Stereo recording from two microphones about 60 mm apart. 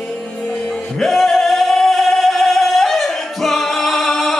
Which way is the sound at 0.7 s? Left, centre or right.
Centre.